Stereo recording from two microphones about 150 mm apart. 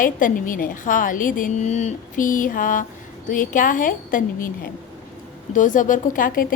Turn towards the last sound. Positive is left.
turn(degrees=65)  # may be behind; listen again after turning